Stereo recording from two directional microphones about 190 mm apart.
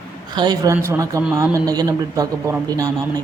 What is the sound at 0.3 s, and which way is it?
Speech, 20° right (ahead or behind).